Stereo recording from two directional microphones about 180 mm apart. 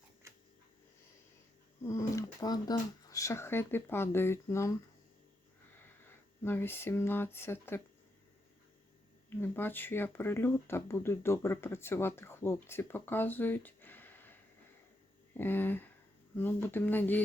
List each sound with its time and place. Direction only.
1.8 s speech: 15° left (ahead or behind)
9.3 s speech: 10° left (ahead or behind)
15.4 s speech: 10° left (ahead or behind)